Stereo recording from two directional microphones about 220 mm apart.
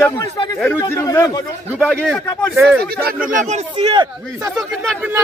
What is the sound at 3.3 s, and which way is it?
Speech, 35° right (ahead or behind).